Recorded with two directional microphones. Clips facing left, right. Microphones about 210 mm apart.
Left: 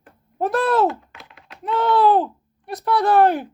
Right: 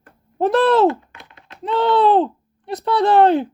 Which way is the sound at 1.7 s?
25° right (ahead or behind).